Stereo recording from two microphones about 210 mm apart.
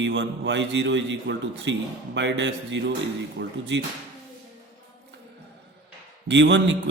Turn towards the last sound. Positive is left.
turn(degrees=-55)  # may be behind; listen again after turning